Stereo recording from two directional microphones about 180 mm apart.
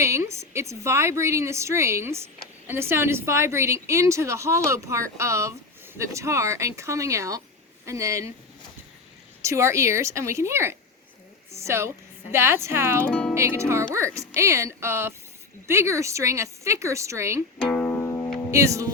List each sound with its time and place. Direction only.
0.0 s a woman's voice: 15° right (ahead or behind)
9.4 s a woman's voice: 15° right (ahead or behind)
13.0 s music: 5° left (ahead or behind)
13.3 s a woman's voice: 15° right (ahead or behind)
17.6 s music: 5° left (ahead or behind)
18.5 s a woman's voice: 15° right (ahead or behind)